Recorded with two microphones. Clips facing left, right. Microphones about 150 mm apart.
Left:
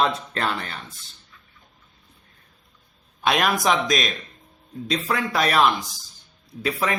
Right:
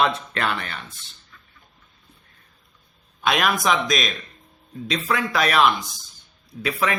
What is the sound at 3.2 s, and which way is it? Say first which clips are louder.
Speech: even; 35° left (ahead or behind).